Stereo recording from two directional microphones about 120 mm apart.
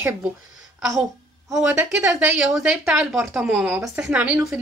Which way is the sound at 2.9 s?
20° right (ahead or behind).